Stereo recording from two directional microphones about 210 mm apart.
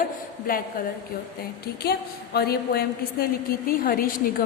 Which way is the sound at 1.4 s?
50° left (ahead or behind).